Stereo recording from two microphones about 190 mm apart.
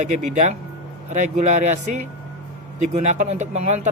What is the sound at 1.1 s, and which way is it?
A man's voice, 40° right (ahead or behind).